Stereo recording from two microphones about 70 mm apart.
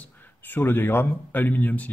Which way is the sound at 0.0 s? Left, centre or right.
Left.